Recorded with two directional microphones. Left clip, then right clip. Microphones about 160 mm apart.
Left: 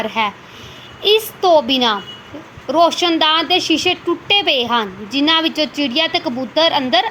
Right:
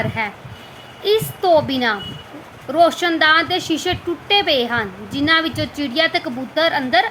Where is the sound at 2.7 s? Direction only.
5° left (ahead or behind).